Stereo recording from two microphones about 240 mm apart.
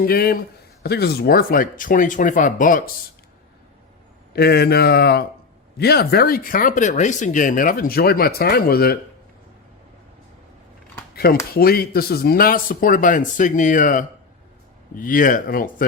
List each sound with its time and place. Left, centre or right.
0.0 s speech: left
4.4 s speech: left
11.5 s speech: left